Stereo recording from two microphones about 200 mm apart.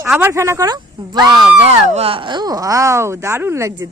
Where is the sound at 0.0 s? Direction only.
10° right (ahead or behind).